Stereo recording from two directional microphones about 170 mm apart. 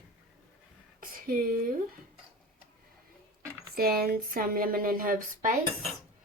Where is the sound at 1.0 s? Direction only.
60° right (ahead or behind).